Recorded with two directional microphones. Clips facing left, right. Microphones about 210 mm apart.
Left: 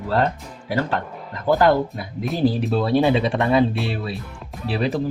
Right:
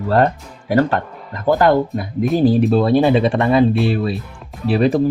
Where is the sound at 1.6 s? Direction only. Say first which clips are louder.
Right 3 dB; 50° right (ahead or behind).